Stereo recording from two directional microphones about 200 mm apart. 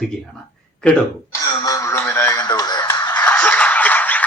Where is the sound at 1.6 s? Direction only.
15° left (ahead or behind).